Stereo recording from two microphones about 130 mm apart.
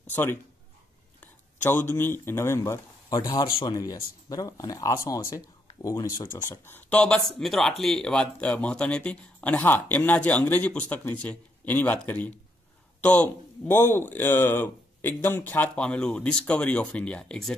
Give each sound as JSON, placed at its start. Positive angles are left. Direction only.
{"t": 0.1, "sound": "speech", "side_deg": 15}